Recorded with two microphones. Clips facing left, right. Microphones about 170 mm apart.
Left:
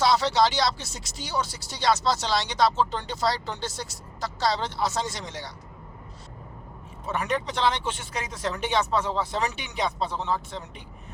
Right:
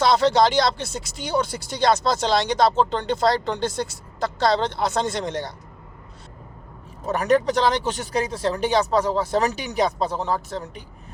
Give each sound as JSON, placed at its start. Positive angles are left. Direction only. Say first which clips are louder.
{"t": 0.0, "sound": "speech", "louder": "right 4 dB", "side_deg": -55}
{"t": 7.0, "sound": "speech", "louder": "right 9 dB", "side_deg": -40}